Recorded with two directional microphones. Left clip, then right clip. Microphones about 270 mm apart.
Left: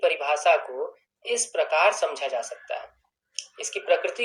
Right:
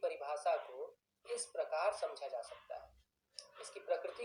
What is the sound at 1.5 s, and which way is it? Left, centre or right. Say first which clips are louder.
Speech: left 16 dB; left.